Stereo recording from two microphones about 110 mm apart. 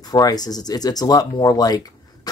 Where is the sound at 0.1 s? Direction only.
35° left (ahead or behind).